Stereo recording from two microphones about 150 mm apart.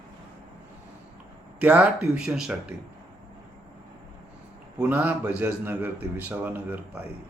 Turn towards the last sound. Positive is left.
turn(degrees=-10)  # may be behind; listen again after turning